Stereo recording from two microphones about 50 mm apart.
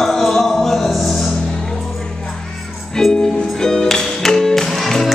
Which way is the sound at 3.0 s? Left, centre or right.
Centre.